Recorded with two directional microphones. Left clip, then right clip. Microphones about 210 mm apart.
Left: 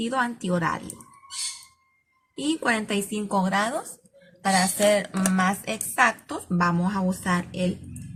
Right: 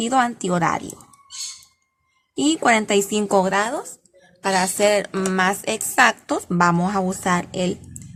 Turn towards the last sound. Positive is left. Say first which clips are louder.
# right 5 dB
turn(degrees=-50)  # may be behind; listen again after turning